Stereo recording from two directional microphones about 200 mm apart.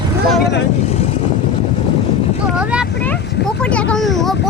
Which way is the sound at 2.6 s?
5° right (ahead or behind).